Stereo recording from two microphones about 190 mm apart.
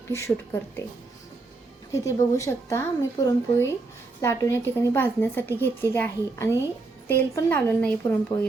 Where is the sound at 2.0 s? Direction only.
15° left (ahead or behind).